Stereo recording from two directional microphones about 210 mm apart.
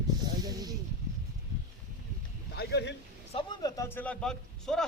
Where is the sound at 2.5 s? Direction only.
50° left (ahead or behind).